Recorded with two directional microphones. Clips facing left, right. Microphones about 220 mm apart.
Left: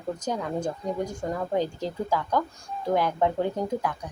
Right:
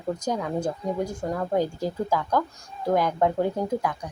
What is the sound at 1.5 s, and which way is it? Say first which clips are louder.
Speech: right 3 dB; 10° right (ahead or behind).